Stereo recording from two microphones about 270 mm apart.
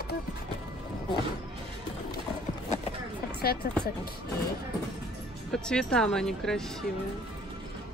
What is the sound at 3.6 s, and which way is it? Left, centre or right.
Speech, left.